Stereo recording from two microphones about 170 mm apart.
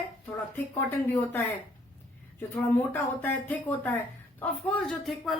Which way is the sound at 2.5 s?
10° left (ahead or behind).